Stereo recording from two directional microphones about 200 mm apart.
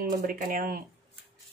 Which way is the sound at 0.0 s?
40° right (ahead or behind).